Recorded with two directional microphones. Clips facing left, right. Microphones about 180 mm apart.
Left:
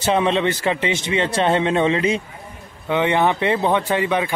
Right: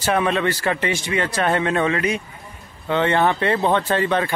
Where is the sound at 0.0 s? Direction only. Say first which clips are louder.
Left 2 dB; 25° left (ahead or behind).